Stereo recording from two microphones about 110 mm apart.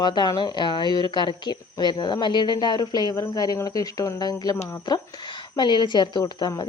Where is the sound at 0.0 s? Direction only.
40° left (ahead or behind).